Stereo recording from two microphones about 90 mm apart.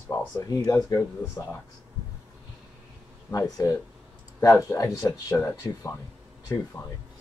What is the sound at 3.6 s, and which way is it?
Speech, 40° left (ahead or behind).